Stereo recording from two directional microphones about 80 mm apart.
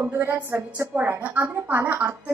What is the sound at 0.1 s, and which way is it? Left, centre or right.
Speech, right.